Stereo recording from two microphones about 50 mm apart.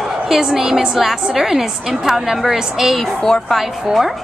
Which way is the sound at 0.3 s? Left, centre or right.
Centre.